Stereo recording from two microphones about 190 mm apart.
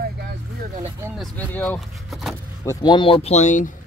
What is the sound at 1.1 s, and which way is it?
Speech, 5° left (ahead or behind).